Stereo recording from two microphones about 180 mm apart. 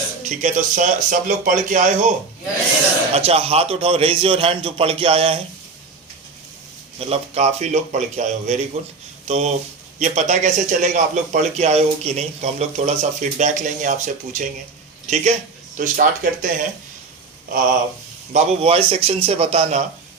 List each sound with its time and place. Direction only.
0.2 s speech: 45° right (ahead or behind)
7.0 s speech: 35° right (ahead or behind)
18.3 s speech: 35° right (ahead or behind)